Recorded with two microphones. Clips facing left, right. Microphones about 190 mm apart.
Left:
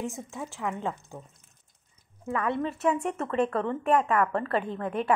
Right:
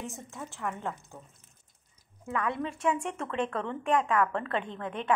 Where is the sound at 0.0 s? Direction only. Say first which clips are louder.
Left 5 dB; 15° left (ahead or behind).